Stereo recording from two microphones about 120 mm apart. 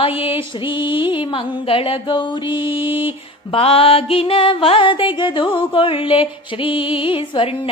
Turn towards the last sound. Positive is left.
turn(degrees=45)  # may be behind; listen again after turning